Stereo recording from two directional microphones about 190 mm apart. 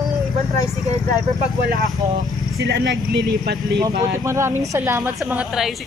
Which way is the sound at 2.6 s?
70° right (ahead or behind).